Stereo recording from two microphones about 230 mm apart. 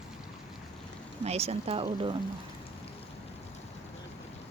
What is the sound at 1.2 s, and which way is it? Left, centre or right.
Speech, right.